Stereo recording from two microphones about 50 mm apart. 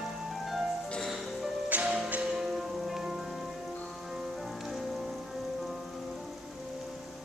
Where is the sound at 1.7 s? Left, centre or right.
Right.